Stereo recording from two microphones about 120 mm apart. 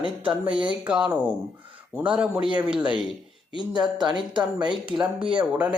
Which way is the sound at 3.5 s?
40° right (ahead or behind).